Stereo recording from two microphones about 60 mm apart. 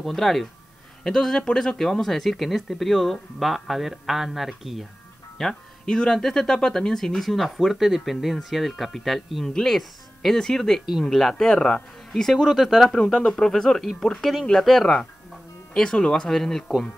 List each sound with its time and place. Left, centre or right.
0.0 s speech: centre
5.4 s speech: centre
11.1 s speech: centre
15.7 s speech: centre